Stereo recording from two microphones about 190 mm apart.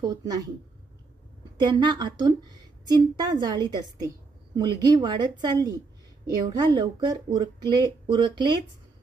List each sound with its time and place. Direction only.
0.0 s speech: 20° right (ahead or behind)
1.6 s speech: 25° right (ahead or behind)